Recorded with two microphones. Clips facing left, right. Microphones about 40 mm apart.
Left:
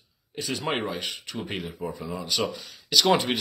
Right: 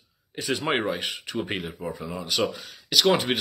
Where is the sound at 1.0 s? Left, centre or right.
Centre.